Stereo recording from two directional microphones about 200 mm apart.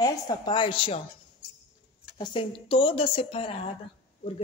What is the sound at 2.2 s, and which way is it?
A woman's voice, 25° left (ahead or behind).